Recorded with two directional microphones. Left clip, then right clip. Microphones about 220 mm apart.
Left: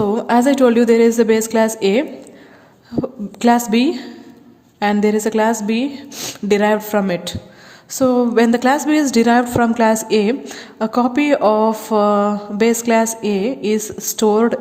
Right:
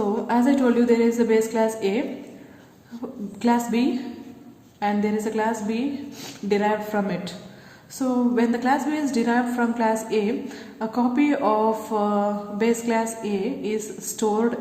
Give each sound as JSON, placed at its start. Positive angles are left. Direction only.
{"t": 0.0, "sound": "a woman's voice", "side_deg": 45}
{"t": 3.4, "sound": "a woman's voice", "side_deg": 45}